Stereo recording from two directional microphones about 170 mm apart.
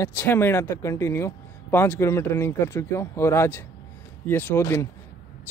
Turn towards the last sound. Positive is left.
turn(degrees=15)  # may be behind; listen again after turning